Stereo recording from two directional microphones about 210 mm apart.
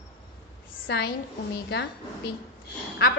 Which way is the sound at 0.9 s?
50° left (ahead or behind).